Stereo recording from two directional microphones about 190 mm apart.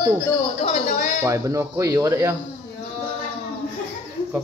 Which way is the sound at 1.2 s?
15° right (ahead or behind).